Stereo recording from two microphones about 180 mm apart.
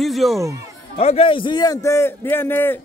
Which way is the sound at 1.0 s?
35° left (ahead or behind).